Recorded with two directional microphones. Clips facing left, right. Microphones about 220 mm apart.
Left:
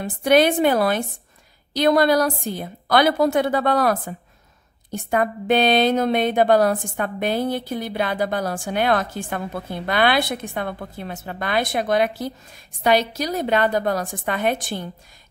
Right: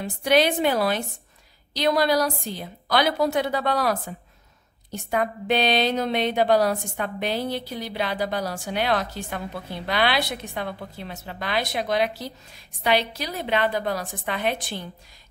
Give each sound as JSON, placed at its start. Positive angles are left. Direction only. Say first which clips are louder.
{"t": 0.0, "sound": "a woman's voice", "louder": "left 4 dB", "side_deg": 50}